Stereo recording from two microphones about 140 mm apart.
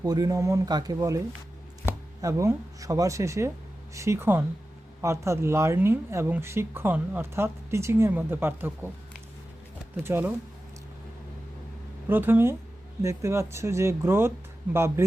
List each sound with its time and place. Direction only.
0.0 s a woman's voice: 30° right (ahead or behind)
10.0 s a woman's voice: 15° right (ahead or behind)
12.0 s a woman's voice: 15° right (ahead or behind)